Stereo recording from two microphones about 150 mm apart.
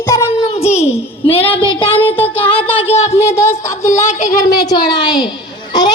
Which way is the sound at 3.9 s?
50° left (ahead or behind).